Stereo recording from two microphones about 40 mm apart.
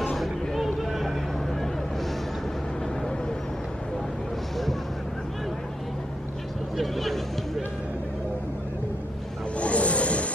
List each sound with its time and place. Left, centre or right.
0.1 s vehicle: centre
6.8 s a sound: centre
9.6 s snake: left